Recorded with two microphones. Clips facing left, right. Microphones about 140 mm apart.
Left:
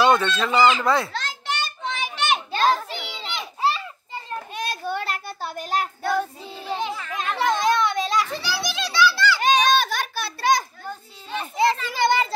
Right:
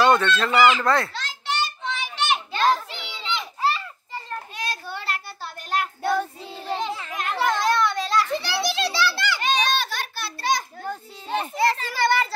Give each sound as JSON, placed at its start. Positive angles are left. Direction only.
{"t": 0.0, "sound": "a child's voice", "side_deg": 10}
{"t": 1.1, "sound": "children playing", "side_deg": 50}
{"t": 3.6, "sound": "children playing", "side_deg": 20}
{"t": 4.6, "sound": "child singing", "side_deg": 50}
{"t": 6.0, "sound": "child singing", "side_deg": 5}
{"t": 7.2, "sound": "children playing", "side_deg": 20}
{"t": 8.5, "sound": "a sound", "side_deg": -30}
{"t": 9.4, "sound": "a sound", "side_deg": 50}
{"t": 10.8, "sound": "children playing", "side_deg": -60}
{"t": 11.5, "sound": "children playing", "side_deg": 20}